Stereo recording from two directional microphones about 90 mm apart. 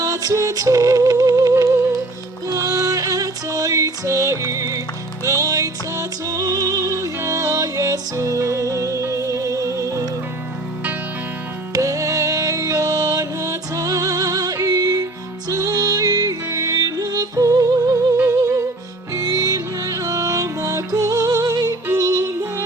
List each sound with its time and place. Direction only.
0.0 s music: 40° right (ahead or behind)
11.7 s music: 40° right (ahead or behind)
21.9 s yodeling: 40° right (ahead or behind)